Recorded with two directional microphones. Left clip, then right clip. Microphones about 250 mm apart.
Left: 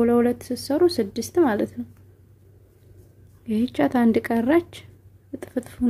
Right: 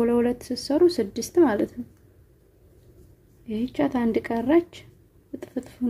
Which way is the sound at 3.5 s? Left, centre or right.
Centre.